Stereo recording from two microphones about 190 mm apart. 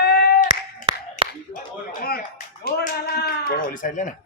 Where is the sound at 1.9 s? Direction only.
50° left (ahead or behind).